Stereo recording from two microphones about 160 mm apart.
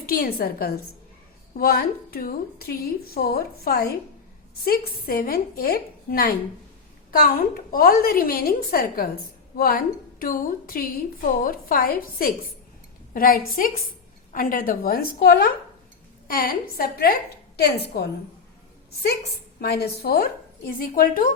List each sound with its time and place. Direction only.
0.0 s a woman's voice: 75° left (ahead or behind)
7.7 s a woman's voice: 65° left (ahead or behind)
17.6 s a woman's voice: 90° left
19.5 s a woman's voice: 80° left; by 21.3 s 60° left (ahead or behind)